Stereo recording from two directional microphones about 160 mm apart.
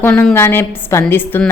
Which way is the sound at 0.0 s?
15° left (ahead or behind).